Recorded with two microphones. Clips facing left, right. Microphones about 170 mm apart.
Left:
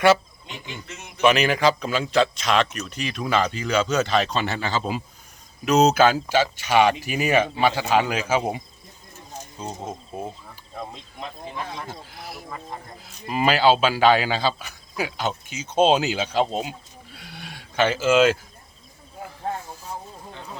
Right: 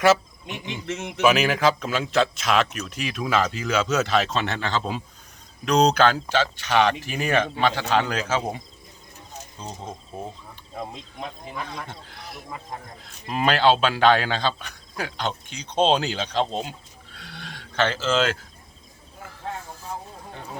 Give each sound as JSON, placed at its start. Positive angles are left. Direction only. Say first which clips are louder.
{"t": 0.0, "sound": "a sound", "louder": "left 1 dB", "side_deg": 0}
{"t": 0.9, "sound": "a man's voice", "louder": "right 10 dB", "side_deg": -85}
{"t": 1.2, "sound": "a man's voice", "louder": "left 1 dB", "side_deg": -5}